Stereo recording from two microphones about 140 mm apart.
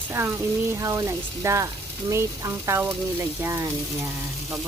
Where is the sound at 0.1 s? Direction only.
20° right (ahead or behind).